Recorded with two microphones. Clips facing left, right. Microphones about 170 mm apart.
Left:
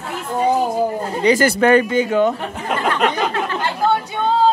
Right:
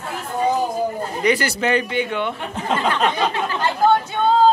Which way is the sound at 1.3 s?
50° left (ahead or behind).